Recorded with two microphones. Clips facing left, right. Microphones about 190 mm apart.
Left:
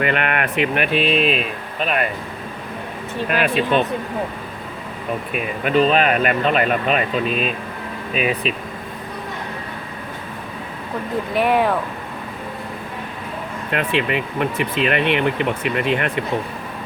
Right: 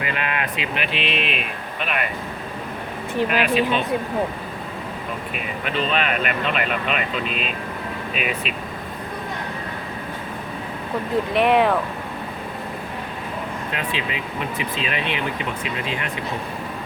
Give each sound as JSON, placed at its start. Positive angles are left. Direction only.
{"t": 0.0, "sound": "speech", "side_deg": 65}
{"t": 3.2, "sound": "speech", "side_deg": 50}
{"t": 5.6, "sound": "speech", "side_deg": 45}
{"t": 11.3, "sound": "speech", "side_deg": 0}
{"t": 13.7, "sound": "speech", "side_deg": 60}